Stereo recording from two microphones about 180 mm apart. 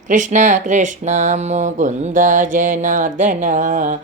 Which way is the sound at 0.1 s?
45° right (ahead or behind).